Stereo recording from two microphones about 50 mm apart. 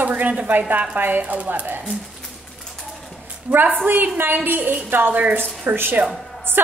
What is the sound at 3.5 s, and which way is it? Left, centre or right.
A woman's voice, right.